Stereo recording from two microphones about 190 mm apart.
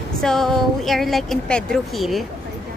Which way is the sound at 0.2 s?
Centre (ahead or behind).